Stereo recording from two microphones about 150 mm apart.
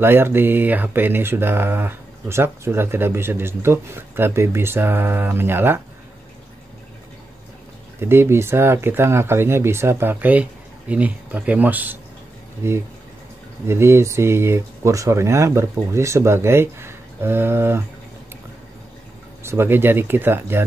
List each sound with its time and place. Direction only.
0.0 s speech: 15° right (ahead or behind)
8.0 s speech: 15° right (ahead or behind)
19.4 s speech: 15° right (ahead or behind)